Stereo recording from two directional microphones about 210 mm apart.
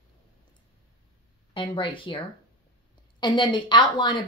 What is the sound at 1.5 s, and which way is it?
Speech, 25° left (ahead or behind).